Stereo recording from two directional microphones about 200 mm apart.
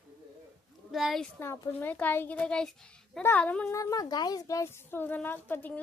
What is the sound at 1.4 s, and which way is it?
A child's voice, 10° left (ahead or behind).